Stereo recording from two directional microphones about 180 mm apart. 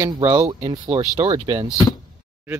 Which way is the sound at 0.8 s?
35° right (ahead or behind).